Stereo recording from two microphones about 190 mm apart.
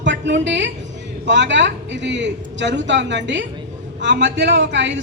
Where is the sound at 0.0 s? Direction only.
70° right (ahead or behind).